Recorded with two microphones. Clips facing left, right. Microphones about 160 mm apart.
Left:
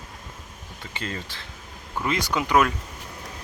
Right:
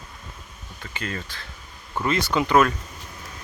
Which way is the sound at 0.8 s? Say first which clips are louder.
Right 1 dB; 25° left (ahead or behind).